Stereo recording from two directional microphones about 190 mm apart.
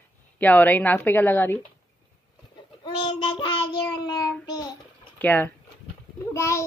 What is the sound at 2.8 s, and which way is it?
Child singing, 25° left (ahead or behind).